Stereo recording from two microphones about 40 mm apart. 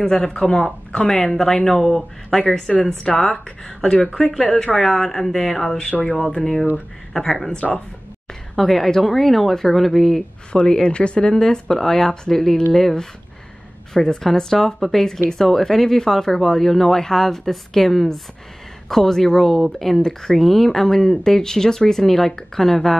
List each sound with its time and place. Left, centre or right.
0.0 s speech: centre
1.0 s a woman's voice: centre
10.5 s speech: left; by 22.9 s centre